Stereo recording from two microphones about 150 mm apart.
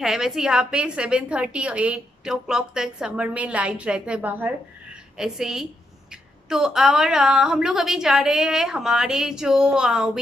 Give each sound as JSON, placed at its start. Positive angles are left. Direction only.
{"t": 0.0, "sound": "a woman's voice", "side_deg": -5}